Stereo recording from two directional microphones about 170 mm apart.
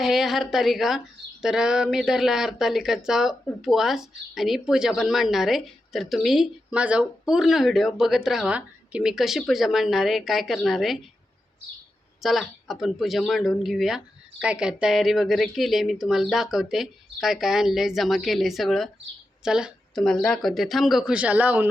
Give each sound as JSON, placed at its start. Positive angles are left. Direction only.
{"t": 0.0, "sound": "speech", "side_deg": 0}
{"t": 12.2, "sound": "speech", "side_deg": 0}